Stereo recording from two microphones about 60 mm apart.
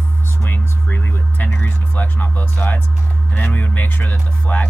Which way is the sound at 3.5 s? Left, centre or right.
Left.